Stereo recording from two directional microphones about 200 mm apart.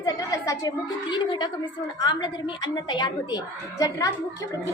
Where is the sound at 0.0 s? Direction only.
20° left (ahead or behind).